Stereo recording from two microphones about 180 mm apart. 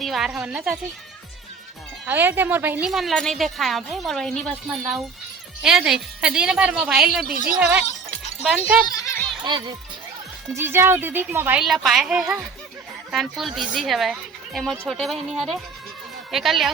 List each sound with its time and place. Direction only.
0.0 s a woman's voice: centre (ahead or behind)
2.0 s a woman's voice: 10° right (ahead or behind)
9.0 s a sound: 15° left (ahead or behind)
9.4 s a child's voice: 25° right (ahead or behind)
10.5 s a woman's voice: 15° right (ahead or behind)